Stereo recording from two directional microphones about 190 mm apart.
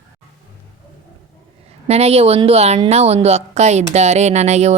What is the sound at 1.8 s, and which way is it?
A woman's voice, 35° right (ahead or behind).